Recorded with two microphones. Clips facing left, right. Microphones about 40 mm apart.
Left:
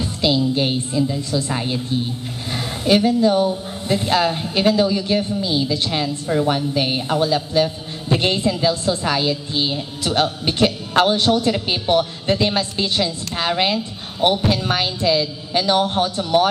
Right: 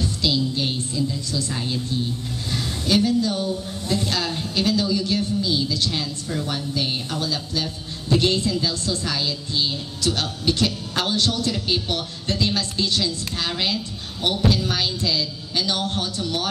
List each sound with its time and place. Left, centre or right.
0.0 s a woman's voice: left